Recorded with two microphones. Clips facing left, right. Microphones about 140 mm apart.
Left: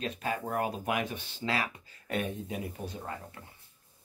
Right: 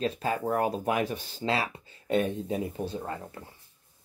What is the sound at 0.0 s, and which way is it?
Speech, 35° right (ahead or behind).